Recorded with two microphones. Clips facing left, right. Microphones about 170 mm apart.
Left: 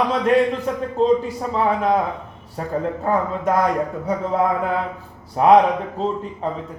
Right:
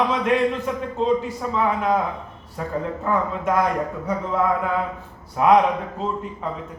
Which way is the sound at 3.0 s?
35° left (ahead or behind).